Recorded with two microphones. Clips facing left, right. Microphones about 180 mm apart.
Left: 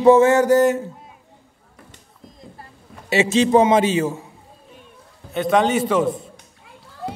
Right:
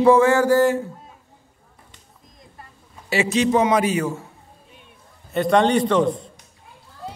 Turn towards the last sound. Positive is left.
turn(degrees=5)  # may be behind; listen again after turning